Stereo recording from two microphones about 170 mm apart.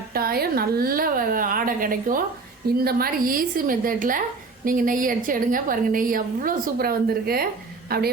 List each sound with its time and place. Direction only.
0.1 s a woman's voice: 60° right (ahead or behind)